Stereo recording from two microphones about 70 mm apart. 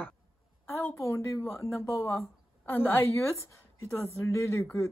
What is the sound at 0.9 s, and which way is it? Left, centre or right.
Speech, left.